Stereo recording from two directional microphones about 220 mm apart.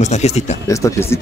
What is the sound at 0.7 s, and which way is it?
Speech, 15° left (ahead or behind).